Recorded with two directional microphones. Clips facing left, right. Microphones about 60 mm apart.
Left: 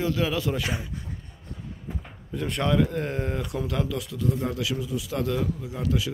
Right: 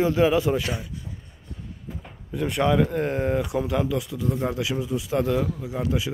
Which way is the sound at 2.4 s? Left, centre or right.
Centre.